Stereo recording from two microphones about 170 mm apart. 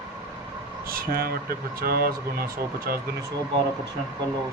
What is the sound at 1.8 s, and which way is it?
Speech, 60° right (ahead or behind).